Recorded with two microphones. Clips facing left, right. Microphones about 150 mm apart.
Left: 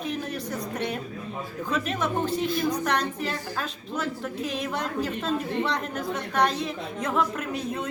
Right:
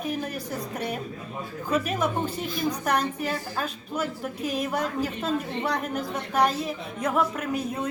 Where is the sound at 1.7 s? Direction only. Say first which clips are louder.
Right 2 dB; 10° right (ahead or behind).